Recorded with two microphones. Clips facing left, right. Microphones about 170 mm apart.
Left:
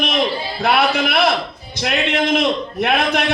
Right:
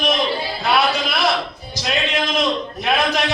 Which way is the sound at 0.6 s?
60° left (ahead or behind).